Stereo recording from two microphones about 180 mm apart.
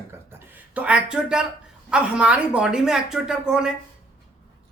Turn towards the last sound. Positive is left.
turn(degrees=-5)  # may be behind; listen again after turning